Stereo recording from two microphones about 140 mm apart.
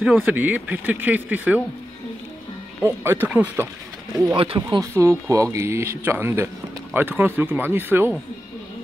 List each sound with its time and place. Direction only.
0.0 s speech: 10° right (ahead or behind)
2.8 s speech: 15° right (ahead or behind)
4.6 s speech: 25° right (ahead or behind)